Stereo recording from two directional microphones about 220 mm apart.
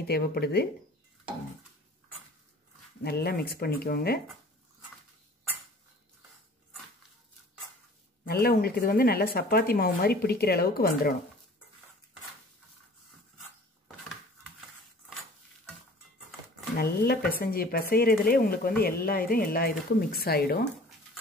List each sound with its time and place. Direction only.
0.0 s speech: 45° left (ahead or behind)
3.0 s speech: 45° left (ahead or behind)
8.3 s speech: 45° left (ahead or behind)
16.7 s speech: 45° left (ahead or behind)